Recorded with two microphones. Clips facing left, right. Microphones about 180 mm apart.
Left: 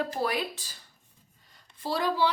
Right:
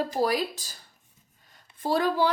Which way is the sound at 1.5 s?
50° right (ahead or behind).